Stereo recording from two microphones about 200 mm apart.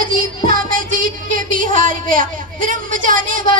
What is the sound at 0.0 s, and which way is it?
Music, 45° right (ahead or behind).